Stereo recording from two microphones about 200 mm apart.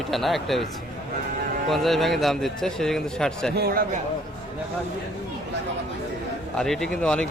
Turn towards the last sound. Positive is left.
turn(degrees=5)  # may be behind; listen again after turning